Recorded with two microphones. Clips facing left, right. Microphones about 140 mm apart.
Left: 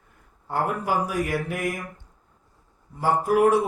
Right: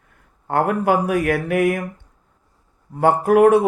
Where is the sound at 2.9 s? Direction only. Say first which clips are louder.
Right 6 dB; 60° right (ahead or behind).